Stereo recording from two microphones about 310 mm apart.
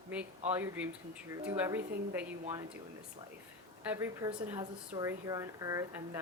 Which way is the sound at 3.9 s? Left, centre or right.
Centre.